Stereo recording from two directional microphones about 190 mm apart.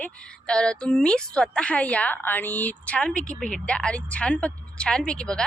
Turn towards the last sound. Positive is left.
turn(degrees=5)  # may be behind; listen again after turning